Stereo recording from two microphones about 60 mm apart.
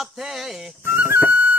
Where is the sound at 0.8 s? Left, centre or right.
Right.